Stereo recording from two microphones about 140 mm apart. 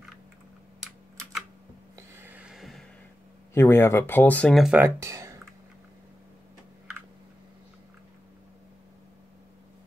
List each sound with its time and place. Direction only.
2.0 s a sound: 15° right (ahead or behind)
3.5 s speech: 15° left (ahead or behind)
4.7 s speech: 15° right (ahead or behind)